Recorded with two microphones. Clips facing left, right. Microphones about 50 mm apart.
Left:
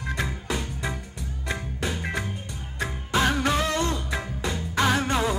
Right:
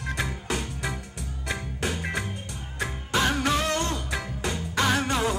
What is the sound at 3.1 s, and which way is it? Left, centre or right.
Music, centre.